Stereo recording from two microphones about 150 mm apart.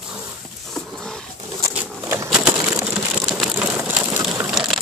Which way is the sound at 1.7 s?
10° right (ahead or behind).